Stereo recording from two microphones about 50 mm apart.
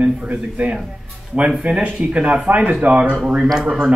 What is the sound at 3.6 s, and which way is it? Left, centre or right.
Speech, centre.